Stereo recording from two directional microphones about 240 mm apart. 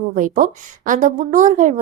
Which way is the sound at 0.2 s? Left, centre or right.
Right.